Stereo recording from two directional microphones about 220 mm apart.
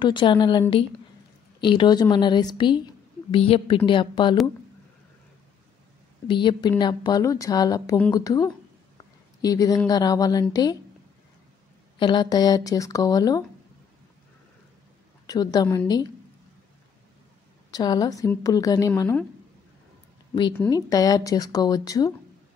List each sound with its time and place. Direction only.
0.0 s a woman's voice: 20° left (ahead or behind)
6.2 s a woman's voice: 20° left (ahead or behind)
12.0 s a woman's voice: 20° left (ahead or behind)
15.2 s a woman's voice: 20° left (ahead or behind)
17.6 s a woman's voice: 15° left (ahead or behind)
20.5 s a woman's voice: 10° left (ahead or behind)